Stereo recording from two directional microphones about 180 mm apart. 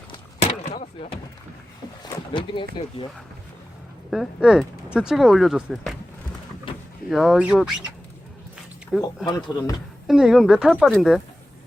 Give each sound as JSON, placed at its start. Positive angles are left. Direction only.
{"t": 0.4, "sound": "a sound", "side_deg": 35}
{"t": 2.1, "sound": "speech", "side_deg": 30}
{"t": 4.1, "sound": "speech", "side_deg": 0}
{"t": 7.1, "sound": "speech", "side_deg": 0}
{"t": 9.2, "sound": "speech", "side_deg": 20}
{"t": 10.1, "sound": "speech", "side_deg": 0}